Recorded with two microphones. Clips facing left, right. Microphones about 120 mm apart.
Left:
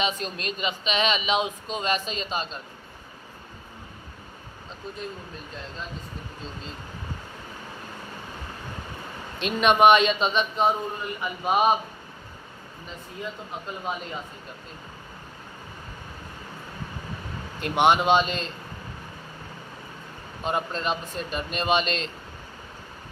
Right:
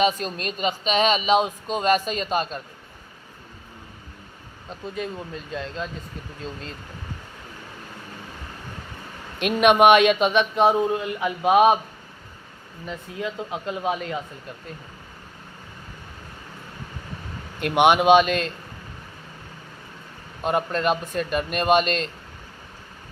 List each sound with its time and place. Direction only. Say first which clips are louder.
0.0 s speech: right 6 dB; 45° right (ahead or behind)
4.9 s speech: right 9 dB; 90° right
9.4 s speech: right 3 dB; 60° right (ahead or behind)
12.9 s speech: right 6 dB; 85° right
17.6 s speech: right 3 dB; 60° right (ahead or behind)
20.4 s speech: right 5 dB; 55° right (ahead or behind)